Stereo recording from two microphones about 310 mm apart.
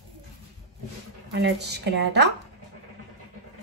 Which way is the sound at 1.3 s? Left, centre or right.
Right.